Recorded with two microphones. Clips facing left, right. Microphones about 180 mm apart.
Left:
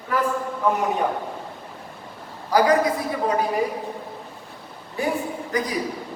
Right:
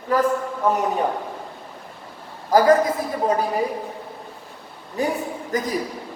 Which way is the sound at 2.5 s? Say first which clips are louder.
Right 2 dB; 45° right (ahead or behind).